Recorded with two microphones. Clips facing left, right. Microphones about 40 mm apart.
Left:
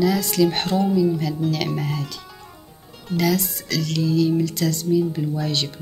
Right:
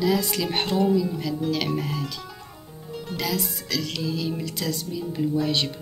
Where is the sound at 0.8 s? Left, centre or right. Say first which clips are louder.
Left 3 dB; centre.